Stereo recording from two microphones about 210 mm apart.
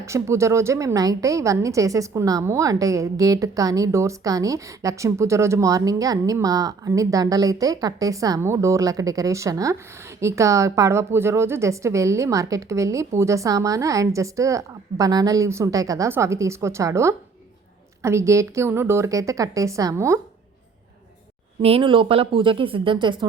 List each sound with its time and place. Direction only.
0.0 s a woman's voice: 15° right (ahead or behind)
21.6 s speech: 25° right (ahead or behind)